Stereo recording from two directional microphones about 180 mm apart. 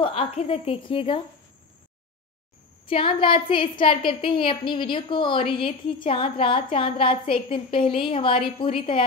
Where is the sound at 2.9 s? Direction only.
30° left (ahead or behind).